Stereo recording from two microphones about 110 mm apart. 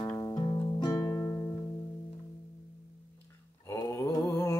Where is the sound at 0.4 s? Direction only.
40° left (ahead or behind).